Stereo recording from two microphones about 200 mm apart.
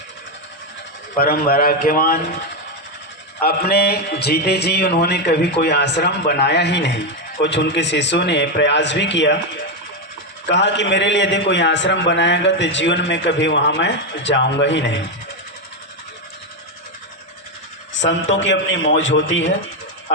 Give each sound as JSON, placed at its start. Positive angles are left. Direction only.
{"t": 1.2, "sound": "a man's voice", "side_deg": 50}
{"t": 3.4, "sound": "speech", "side_deg": 50}
{"t": 10.4, "sound": "speech", "side_deg": 60}
{"t": 17.9, "sound": "a man's voice", "side_deg": 65}